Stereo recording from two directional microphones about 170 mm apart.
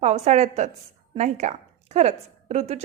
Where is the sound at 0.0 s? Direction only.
40° right (ahead or behind).